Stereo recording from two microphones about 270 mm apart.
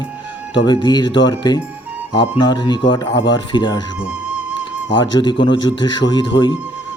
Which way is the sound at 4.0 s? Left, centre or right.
Centre.